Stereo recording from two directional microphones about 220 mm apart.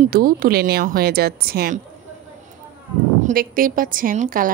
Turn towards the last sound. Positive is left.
turn(degrees=-35)  # may be behind; listen again after turning